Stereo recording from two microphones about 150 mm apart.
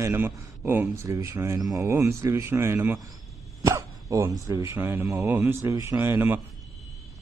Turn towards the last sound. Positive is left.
turn(degrees=-15)  # may be behind; listen again after turning